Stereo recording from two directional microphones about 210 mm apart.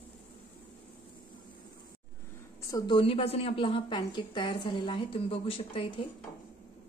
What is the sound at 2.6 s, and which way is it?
A woman's voice, 20° left (ahead or behind).